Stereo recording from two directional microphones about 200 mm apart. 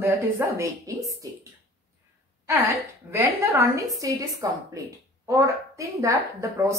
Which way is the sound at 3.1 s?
15° right (ahead or behind).